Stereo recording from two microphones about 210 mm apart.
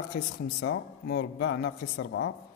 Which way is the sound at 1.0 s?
60° left (ahead or behind).